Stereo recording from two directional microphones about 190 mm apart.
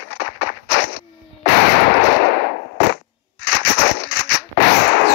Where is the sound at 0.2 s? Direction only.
65° left (ahead or behind).